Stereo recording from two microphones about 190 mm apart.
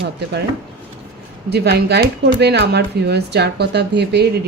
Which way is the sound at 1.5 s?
60° right (ahead or behind).